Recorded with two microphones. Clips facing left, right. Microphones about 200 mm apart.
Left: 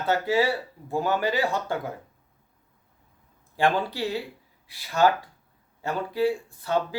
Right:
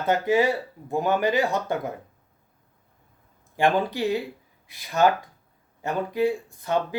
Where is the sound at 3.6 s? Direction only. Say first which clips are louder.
Right 2 dB; 15° right (ahead or behind).